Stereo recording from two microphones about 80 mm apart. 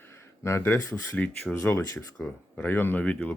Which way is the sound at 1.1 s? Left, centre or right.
Centre.